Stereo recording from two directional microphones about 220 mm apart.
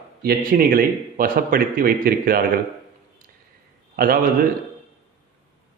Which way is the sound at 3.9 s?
40° right (ahead or behind).